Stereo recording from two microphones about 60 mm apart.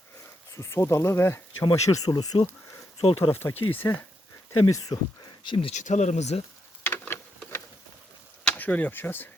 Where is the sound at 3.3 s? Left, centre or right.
Left.